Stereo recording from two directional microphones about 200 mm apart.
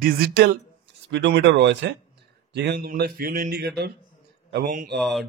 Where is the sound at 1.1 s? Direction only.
65° right (ahead or behind).